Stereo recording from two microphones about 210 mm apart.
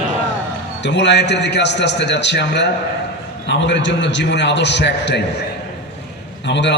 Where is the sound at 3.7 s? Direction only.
60° left (ahead or behind).